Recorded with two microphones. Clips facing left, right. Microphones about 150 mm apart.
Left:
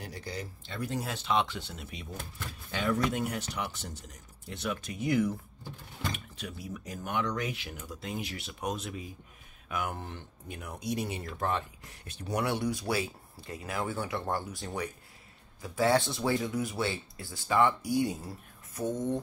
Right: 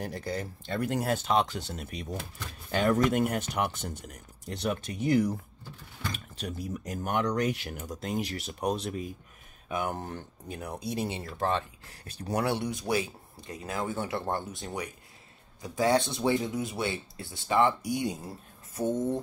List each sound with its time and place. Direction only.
0.0 s speech: 50° right (ahead or behind)
4.5 s speech: 35° right (ahead or behind)
6.4 s speech: 45° right (ahead or behind); by 9.9 s 25° right (ahead or behind)
9.9 s speech: 45° right (ahead or behind); by 18.3 s 20° right (ahead or behind)